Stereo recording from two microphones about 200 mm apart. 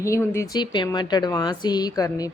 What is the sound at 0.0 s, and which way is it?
A woman's voice, 15° left (ahead or behind).